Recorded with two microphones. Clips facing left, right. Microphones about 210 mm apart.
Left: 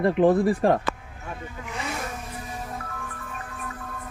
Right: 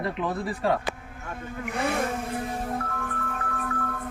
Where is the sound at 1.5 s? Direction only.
55° right (ahead or behind).